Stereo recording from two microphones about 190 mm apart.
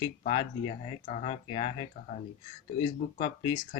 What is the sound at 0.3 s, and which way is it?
Speech, 30° left (ahead or behind).